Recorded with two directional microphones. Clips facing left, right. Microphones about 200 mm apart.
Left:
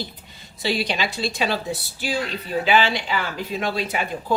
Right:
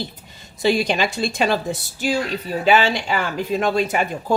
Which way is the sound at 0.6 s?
50° right (ahead or behind).